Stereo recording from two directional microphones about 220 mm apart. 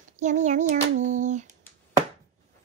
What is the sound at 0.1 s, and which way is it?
Child singing, 35° right (ahead or behind).